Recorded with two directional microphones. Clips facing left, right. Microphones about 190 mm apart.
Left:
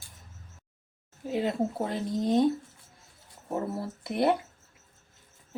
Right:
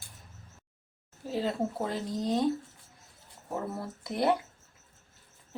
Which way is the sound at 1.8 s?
25° left (ahead or behind).